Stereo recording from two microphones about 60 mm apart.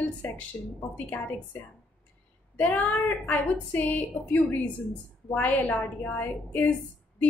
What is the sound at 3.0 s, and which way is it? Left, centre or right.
A woman's voice, left.